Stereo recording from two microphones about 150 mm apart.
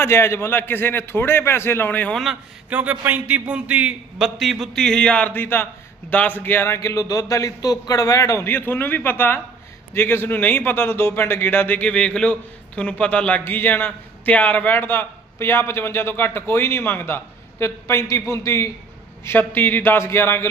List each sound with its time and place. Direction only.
0.0 s a man's voice: 15° left (ahead or behind)
2.2 s a man's voice: 10° right (ahead or behind); by 20.5 s 15° left (ahead or behind)